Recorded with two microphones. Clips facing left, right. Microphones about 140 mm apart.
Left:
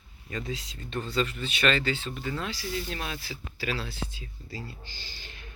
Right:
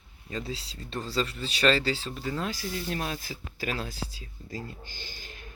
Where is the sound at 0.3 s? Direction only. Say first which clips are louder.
Even; 35° right (ahead or behind).